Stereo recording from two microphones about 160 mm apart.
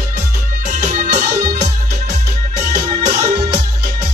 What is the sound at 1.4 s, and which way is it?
Music, 25° right (ahead or behind).